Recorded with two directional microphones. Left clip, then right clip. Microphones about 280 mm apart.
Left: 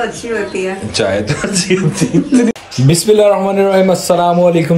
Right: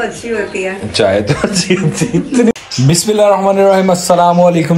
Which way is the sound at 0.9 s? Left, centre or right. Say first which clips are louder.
Right 4 dB; centre.